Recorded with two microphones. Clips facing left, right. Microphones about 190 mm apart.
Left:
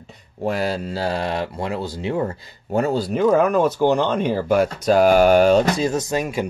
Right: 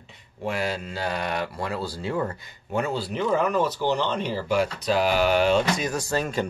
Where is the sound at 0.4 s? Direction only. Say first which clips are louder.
Left 5 dB; 35° left (ahead or behind).